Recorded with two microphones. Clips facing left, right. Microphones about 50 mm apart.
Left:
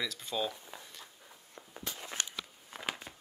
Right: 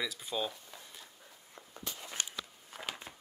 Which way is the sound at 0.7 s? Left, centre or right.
Centre.